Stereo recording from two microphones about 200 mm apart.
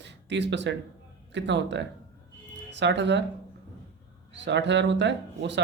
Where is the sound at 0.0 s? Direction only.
60° right (ahead or behind).